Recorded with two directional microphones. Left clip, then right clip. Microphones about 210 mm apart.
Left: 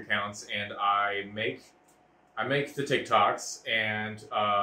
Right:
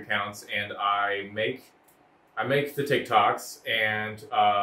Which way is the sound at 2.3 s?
20° right (ahead or behind).